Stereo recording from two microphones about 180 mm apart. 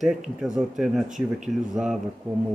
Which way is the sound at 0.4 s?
Centre (ahead or behind).